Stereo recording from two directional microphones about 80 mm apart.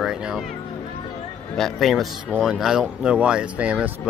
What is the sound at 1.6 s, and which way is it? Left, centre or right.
A man's voice, centre.